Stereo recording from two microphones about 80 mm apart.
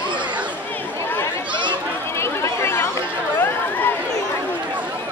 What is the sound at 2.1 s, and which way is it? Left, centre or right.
Chatter, left.